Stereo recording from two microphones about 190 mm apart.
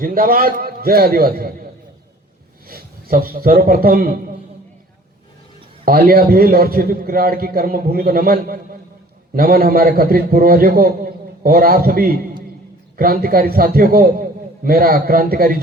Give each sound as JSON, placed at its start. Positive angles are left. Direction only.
{"t": 0.0, "sound": "a man's voice", "side_deg": -50}
{"t": 2.6, "sound": "a man's voice", "side_deg": -50}
{"t": 5.8, "sound": "a man's voice", "side_deg": -50}